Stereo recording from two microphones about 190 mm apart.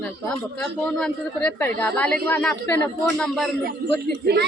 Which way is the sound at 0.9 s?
5° left (ahead or behind).